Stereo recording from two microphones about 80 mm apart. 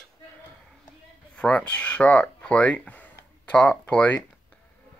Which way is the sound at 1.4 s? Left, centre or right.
Centre.